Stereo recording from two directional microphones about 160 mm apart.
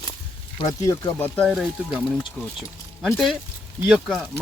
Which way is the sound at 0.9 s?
20° left (ahead or behind).